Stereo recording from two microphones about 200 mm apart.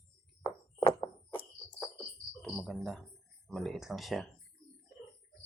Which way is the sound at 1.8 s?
Centre (ahead or behind).